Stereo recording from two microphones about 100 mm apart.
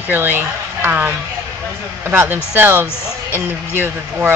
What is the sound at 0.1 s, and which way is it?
Speech, 20° right (ahead or behind).